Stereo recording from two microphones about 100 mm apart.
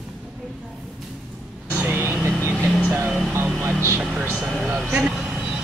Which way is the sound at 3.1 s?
Centre (ahead or behind).